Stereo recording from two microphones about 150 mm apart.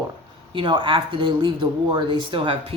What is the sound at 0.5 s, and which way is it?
Speech, 30° right (ahead or behind).